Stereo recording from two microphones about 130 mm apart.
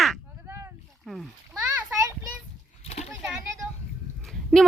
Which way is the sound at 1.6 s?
20° right (ahead or behind).